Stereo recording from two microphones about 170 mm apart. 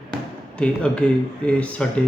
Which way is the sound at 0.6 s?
5° left (ahead or behind).